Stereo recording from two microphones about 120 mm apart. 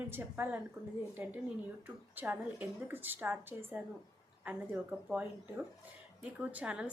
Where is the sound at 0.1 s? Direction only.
20° right (ahead or behind).